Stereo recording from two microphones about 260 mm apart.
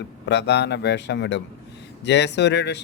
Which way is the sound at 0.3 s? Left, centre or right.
Left.